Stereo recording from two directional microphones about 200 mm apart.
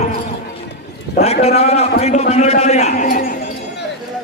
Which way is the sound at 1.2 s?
30° left (ahead or behind).